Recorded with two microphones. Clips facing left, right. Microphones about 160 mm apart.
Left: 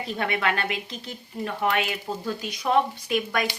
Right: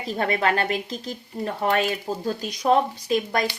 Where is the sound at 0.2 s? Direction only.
35° right (ahead or behind).